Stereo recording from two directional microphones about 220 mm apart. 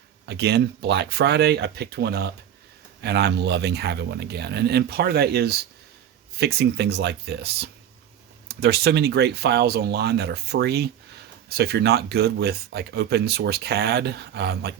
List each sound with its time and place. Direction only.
0.3 s speech: 45° right (ahead or behind)